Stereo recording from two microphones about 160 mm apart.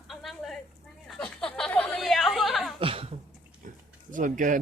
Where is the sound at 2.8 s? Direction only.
35° right (ahead or behind).